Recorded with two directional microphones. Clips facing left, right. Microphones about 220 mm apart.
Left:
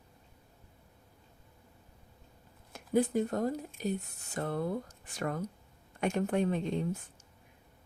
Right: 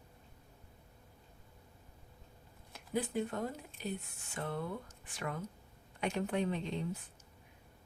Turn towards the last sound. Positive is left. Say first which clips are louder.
# left 5 dB
turn(degrees=45)  # may be behind; listen again after turning